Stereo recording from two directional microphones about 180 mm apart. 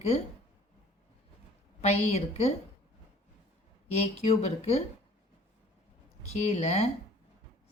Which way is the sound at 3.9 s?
40° left (ahead or behind).